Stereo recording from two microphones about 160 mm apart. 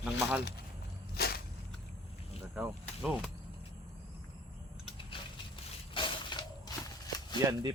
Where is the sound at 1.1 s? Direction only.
80° left.